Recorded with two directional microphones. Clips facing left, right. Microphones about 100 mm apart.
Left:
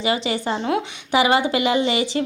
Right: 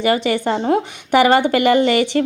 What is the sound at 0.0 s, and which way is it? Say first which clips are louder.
A woman's voice: right 5 dB; 50° right (ahead or behind).